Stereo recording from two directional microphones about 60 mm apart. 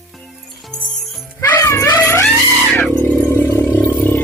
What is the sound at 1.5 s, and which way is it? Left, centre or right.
Music, left.